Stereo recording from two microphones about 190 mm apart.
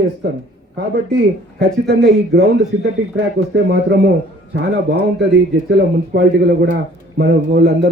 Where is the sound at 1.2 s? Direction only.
60° right (ahead or behind).